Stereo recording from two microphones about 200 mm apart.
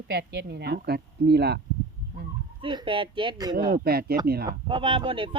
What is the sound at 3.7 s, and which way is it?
Speech, 50° right (ahead or behind).